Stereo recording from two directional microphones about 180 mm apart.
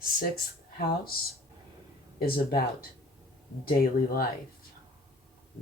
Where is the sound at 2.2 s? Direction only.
60° left (ahead or behind).